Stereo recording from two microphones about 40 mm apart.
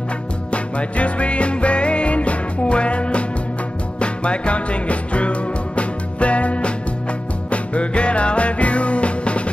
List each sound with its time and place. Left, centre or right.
0.5 s music: left